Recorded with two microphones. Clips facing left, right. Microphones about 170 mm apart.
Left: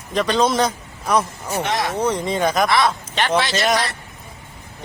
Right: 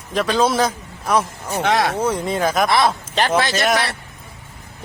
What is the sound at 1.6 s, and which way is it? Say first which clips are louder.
Speech: right 6 dB; 65° right (ahead or behind).